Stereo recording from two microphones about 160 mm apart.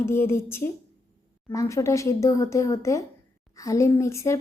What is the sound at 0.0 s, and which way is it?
A woman's voice, 15° left (ahead or behind).